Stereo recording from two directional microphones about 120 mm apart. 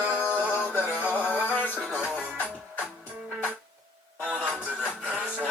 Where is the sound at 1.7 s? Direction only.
5° right (ahead or behind).